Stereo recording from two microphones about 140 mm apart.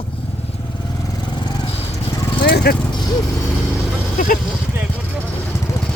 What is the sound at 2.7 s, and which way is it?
Speech, 90° left.